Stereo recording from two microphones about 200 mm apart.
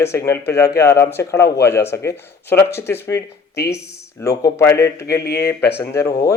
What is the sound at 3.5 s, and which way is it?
Speech, 55° left (ahead or behind).